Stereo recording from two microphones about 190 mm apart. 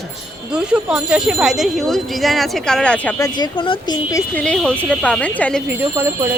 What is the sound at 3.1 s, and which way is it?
Speech, 20° left (ahead or behind).